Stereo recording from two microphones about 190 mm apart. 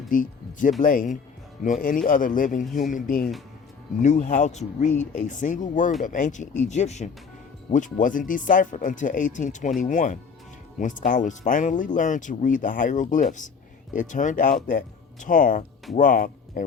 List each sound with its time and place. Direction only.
0.1 s speech: 45° left (ahead or behind)